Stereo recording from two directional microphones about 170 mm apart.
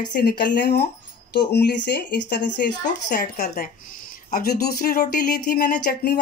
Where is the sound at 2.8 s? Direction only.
50° left (ahead or behind).